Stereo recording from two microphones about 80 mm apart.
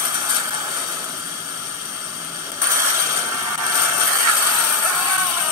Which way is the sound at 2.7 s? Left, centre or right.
Right.